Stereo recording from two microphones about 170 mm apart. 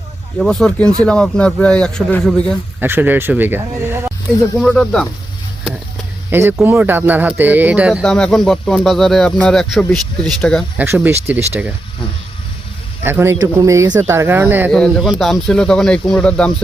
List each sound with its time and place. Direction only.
0.3 s speech: 5° left (ahead or behind)
2.8 s speech: 10° right (ahead or behind)
4.5 s speech: centre (ahead or behind)
6.3 s speech: 15° right (ahead or behind)
8.0 s speech: 5° left (ahead or behind)
10.8 s speech: 10° right (ahead or behind)
13.0 s speech: 15° right (ahead or behind)
14.7 s speech: centre (ahead or behind)